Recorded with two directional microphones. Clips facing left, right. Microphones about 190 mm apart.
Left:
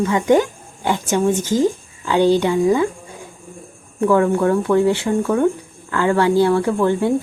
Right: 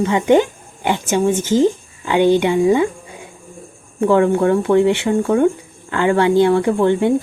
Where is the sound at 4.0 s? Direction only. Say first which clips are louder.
Right 2 dB; 20° right (ahead or behind).